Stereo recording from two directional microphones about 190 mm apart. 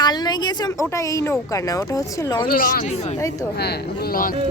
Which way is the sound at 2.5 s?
50° left (ahead or behind).